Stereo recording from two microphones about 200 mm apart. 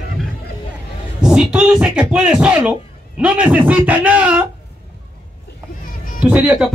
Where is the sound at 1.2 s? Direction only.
5° right (ahead or behind).